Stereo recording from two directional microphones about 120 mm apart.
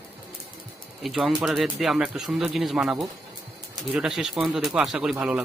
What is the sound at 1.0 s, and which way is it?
Speech, centre (ahead or behind).